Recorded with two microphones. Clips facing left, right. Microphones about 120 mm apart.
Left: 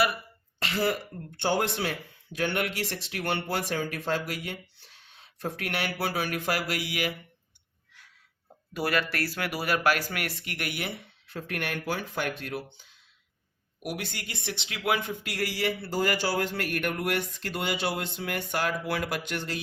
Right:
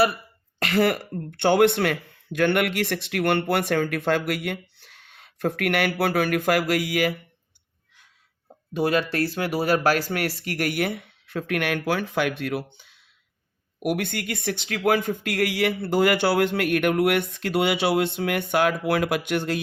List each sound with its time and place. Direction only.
0.6 s speech: 60° right (ahead or behind); by 7.2 s 45° right (ahead or behind)
8.4 s speech: 20° right (ahead or behind); by 12.8 s 70° right (ahead or behind)
13.7 s speech: 55° right (ahead or behind)